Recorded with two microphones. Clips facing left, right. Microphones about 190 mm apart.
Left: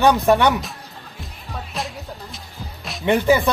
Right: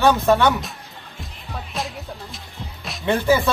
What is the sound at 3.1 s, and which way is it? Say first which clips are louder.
Speech: left 2 dB; 15° left (ahead or behind).